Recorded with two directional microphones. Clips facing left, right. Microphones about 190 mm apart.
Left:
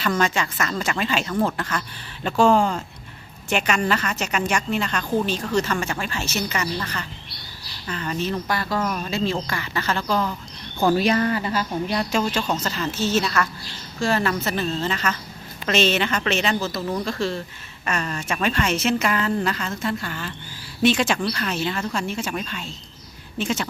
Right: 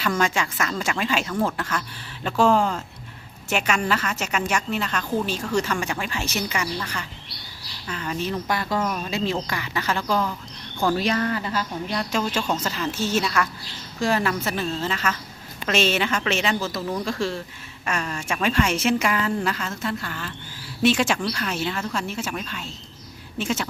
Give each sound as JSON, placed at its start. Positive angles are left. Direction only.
{"t": 0.2, "sound": "a woman's voice", "side_deg": -10}
{"t": 1.3, "sound": "a woman's voice", "side_deg": 5}
{"t": 8.4, "sound": "a woman's voice", "side_deg": -20}
{"t": 10.9, "sound": "a woman's voice", "side_deg": 10}
{"t": 12.1, "sound": "a woman's voice", "side_deg": -5}